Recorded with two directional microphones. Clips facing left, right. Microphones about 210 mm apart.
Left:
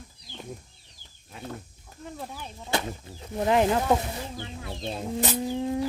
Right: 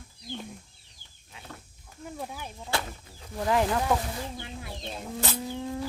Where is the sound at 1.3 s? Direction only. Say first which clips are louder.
Left 9 dB; 50° left (ahead or behind).